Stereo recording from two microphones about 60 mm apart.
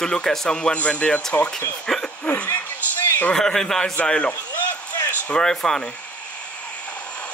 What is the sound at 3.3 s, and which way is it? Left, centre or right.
Speech, centre.